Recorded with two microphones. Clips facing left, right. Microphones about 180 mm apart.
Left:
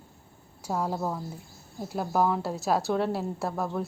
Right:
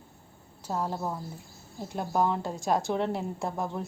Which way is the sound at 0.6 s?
10° left (ahead or behind).